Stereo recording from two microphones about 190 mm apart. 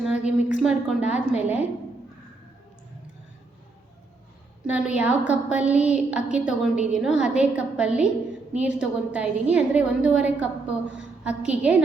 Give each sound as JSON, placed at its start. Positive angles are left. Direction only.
{"t": 0.6, "sound": "a woman's voice", "side_deg": -5}
{"t": 1.0, "sound": "a woman's voice", "side_deg": 35}
{"t": 1.4, "sound": "a woman's voice", "side_deg": -10}
{"t": 4.6, "sound": "a woman's voice", "side_deg": -5}